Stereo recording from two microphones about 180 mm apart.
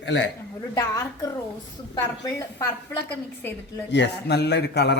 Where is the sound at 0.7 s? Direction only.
15° left (ahead or behind).